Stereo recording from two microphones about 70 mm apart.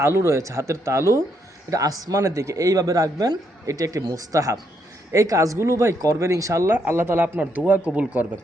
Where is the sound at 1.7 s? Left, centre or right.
Right.